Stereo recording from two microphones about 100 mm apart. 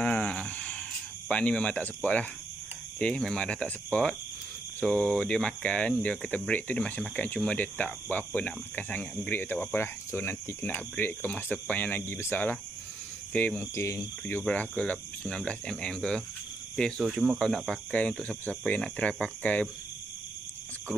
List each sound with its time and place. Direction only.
0.0 s a sound: 15° left (ahead or behind)
1.3 s speech: 10° left (ahead or behind)
3.0 s speech: 10° left (ahead or behind)
13.7 s speech: 30° left (ahead or behind)
14.4 s speech: 15° left (ahead or behind)
17.1 s speech: 5° right (ahead or behind)
17.6 s speech: 10° left (ahead or behind)